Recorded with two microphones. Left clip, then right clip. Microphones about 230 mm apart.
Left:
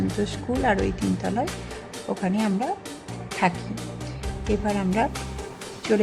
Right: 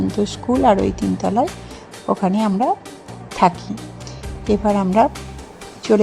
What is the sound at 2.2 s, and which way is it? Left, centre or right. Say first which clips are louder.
Speech: right 7 dB; centre.